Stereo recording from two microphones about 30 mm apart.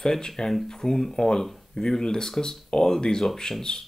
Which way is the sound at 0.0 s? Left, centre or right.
Left.